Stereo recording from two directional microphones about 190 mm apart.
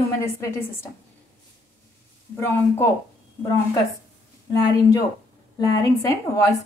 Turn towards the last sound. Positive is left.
turn(degrees=15)  # may be behind; listen again after turning